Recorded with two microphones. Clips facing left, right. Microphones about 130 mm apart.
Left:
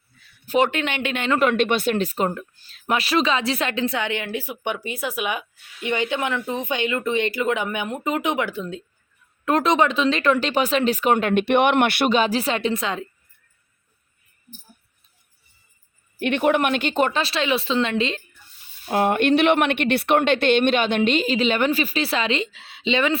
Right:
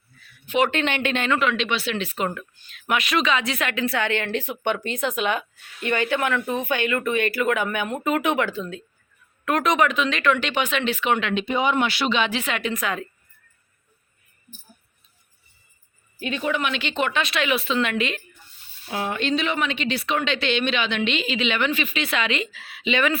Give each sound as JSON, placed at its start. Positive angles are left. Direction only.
{"t": 0.4, "sound": "a man's voice", "side_deg": 40}
{"t": 0.7, "sound": "speech", "side_deg": 10}
{"t": 1.3, "sound": "speech", "side_deg": 45}
{"t": 11.4, "sound": "speech", "side_deg": 70}
{"t": 16.1, "sound": "speech", "side_deg": 65}
{"t": 18.9, "sound": "a woman's voice", "side_deg": 55}